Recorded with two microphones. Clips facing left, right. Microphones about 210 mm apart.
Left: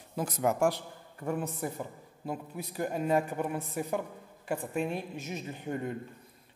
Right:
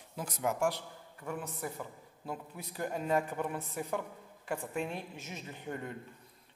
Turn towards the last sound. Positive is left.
turn(degrees=20)  # may be behind; listen again after turning